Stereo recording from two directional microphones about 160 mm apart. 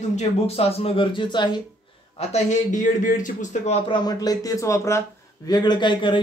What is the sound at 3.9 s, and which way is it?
Speech, 25° left (ahead or behind).